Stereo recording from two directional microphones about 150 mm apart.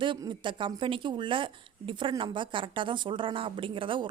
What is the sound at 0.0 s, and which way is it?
A woman's voice, 30° right (ahead or behind).